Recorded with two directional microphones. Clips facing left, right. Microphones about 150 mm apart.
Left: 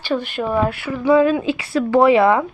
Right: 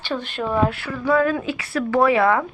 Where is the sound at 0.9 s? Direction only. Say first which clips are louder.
Left 8 dB; 20° left (ahead or behind).